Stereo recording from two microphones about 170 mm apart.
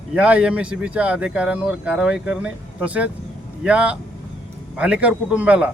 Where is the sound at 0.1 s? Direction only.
5° right (ahead or behind).